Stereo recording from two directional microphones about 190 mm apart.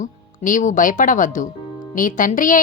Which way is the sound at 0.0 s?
45° left (ahead or behind).